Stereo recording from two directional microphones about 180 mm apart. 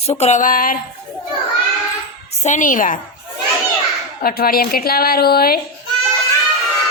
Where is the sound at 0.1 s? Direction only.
40° left (ahead or behind).